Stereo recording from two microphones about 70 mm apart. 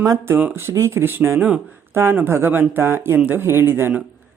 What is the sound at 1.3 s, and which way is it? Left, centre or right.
Speech, centre.